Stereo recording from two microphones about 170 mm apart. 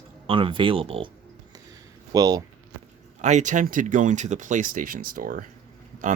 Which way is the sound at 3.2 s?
45° right (ahead or behind).